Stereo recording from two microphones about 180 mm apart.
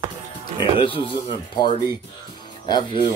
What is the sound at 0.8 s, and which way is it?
Speech, 30° left (ahead or behind).